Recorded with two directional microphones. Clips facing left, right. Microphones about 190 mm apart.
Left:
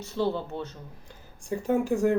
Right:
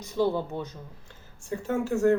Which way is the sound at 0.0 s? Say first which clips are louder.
Right 2 dB; 10° right (ahead or behind).